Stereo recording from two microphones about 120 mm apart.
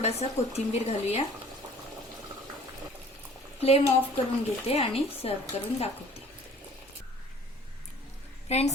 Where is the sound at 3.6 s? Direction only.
55° left (ahead or behind).